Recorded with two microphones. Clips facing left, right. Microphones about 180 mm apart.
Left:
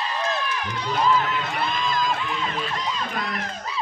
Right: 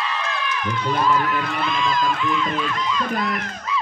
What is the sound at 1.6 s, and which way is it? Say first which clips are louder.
Speech: right 3 dB; 40° left (ahead or behind).